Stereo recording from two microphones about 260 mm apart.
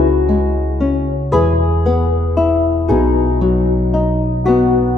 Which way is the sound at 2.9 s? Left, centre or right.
Centre.